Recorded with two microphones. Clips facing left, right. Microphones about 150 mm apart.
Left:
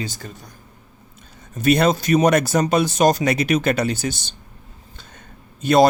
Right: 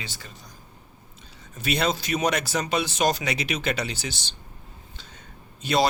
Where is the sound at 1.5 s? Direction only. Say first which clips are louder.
Left 9 dB; 50° left (ahead or behind).